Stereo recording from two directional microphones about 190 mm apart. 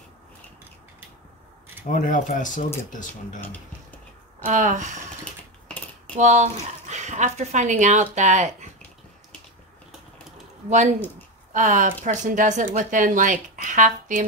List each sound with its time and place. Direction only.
2.0 s speech: 45° left (ahead or behind)
4.5 s speech: 40° right (ahead or behind)
6.1 s speech: 40° right (ahead or behind)
10.7 s speech: 40° right (ahead or behind)